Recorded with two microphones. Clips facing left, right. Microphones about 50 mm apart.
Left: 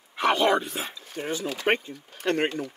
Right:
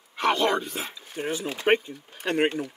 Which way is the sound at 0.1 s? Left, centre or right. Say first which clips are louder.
Left 1 dB; centre.